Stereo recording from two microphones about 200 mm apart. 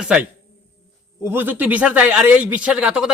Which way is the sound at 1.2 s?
10° right (ahead or behind).